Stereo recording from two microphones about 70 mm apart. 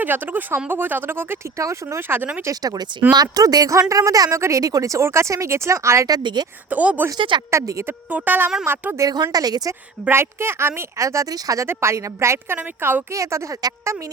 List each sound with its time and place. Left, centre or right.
0.0 s speech: right
1.5 s speech: right
2.0 s speech: right
2.5 s speech: right
6.1 s speech: right
6.7 s a woman's voice: right
7.5 s speech: right
7.9 s a woman's voice: right
9.0 s speech: right
10.1 s speech: right
11.0 s speech: right
11.6 s speech: right
12.5 s a woman's voice: right
13.1 s speech: right